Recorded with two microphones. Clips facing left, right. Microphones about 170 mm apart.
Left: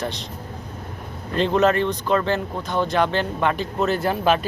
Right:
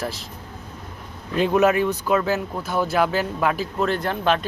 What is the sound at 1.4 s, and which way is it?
Speech, 10° right (ahead or behind).